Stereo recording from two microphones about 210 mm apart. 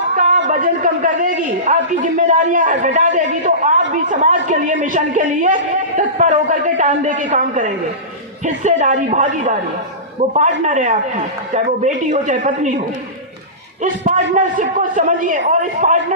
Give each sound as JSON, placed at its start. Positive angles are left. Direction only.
{"t": 0.2, "sound": "a man's voice", "side_deg": -40}
{"t": 13.8, "sound": "a man's voice", "side_deg": -35}